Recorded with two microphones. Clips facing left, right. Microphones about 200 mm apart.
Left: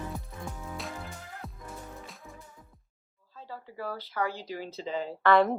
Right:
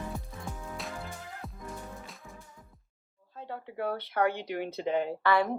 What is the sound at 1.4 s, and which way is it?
Music, centre (ahead or behind).